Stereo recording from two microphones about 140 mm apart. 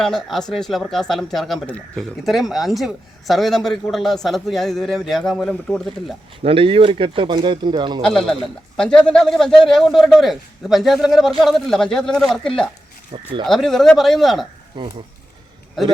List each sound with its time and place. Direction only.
0.0 s a man's voice: 5° left (ahead or behind)
6.4 s speech: 40° right (ahead or behind)
8.0 s a man's voice: 5° left (ahead or behind)
14.8 s speech: 35° right (ahead or behind)